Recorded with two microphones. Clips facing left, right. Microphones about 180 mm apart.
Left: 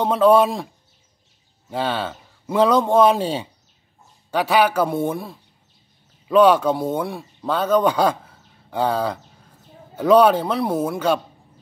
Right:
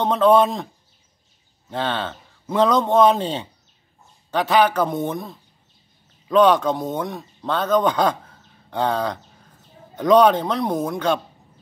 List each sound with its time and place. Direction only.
0.0 s speech: 10° left (ahead or behind)
1.7 s speech: 10° left (ahead or behind)